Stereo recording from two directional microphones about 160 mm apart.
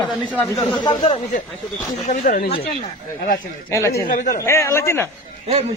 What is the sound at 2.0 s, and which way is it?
Speech, 55° left (ahead or behind).